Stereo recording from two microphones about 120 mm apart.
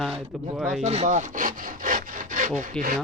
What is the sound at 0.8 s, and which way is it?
Speech, 70° right (ahead or behind).